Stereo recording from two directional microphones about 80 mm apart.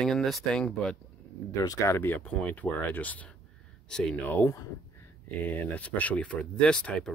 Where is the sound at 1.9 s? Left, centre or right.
Left; by 4.2 s centre.